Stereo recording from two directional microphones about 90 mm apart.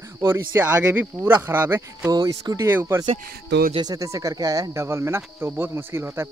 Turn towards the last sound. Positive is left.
turn(degrees=-30)  # may be behind; listen again after turning